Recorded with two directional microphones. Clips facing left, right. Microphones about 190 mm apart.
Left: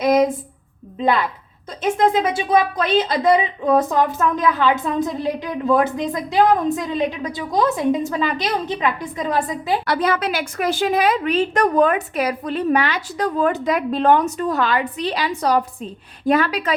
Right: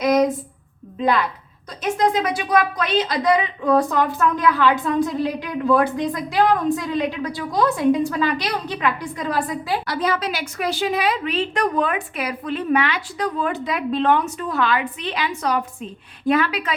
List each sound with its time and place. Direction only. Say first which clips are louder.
0.0 s a sound: left 1 dB; 25° left (ahead or behind)
1.8 s a woman's voice: left 2 dB; 25° left (ahead or behind)
9.8 s a woman's voice: left 3 dB; 60° left (ahead or behind); by 16.7 s 40° left (ahead or behind)